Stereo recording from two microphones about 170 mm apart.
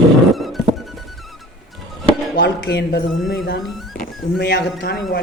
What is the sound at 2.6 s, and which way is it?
Speech, 80° left.